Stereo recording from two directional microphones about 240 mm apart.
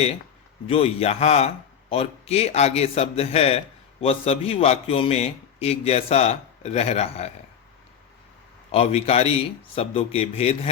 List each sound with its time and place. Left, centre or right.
0.7 s a man's voice: left
8.7 s a man's voice: left